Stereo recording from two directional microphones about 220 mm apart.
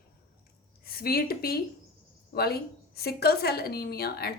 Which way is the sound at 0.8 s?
45° left (ahead or behind).